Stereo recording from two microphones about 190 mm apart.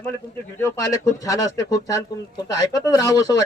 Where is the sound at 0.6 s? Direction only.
15° left (ahead or behind).